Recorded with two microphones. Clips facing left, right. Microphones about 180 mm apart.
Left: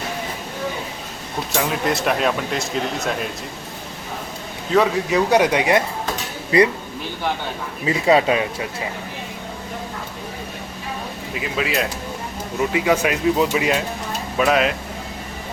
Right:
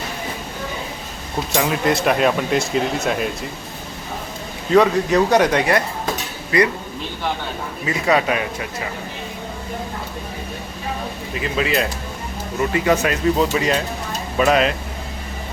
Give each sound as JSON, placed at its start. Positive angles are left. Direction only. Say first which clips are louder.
{"t": 1.5, "sound": "speech", "louder": "right 3 dB", "side_deg": 0}
{"t": 4.7, "sound": "speech", "louder": "right 3 dB", "side_deg": 5}
{"t": 6.5, "sound": "speech", "louder": "left 2 dB", "side_deg": 30}
{"t": 7.9, "sound": "speech", "louder": "left 2 dB", "side_deg": 25}
{"t": 11.3, "sound": "speech", "louder": "right 2 dB", "side_deg": 5}